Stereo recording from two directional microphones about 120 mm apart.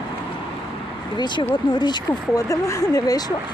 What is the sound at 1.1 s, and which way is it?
Speech, 40° left (ahead or behind).